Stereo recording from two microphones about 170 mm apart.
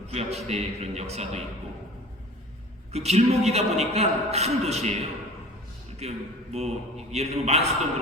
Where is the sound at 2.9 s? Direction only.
40° right (ahead or behind).